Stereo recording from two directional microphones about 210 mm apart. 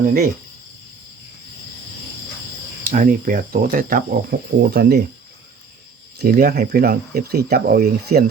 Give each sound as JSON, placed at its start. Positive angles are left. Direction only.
{"t": 2.8, "sound": "speech", "side_deg": -40}
{"t": 6.1, "sound": "speech", "side_deg": -45}